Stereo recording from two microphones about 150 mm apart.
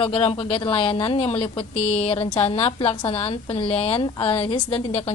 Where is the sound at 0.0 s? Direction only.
40° left (ahead or behind).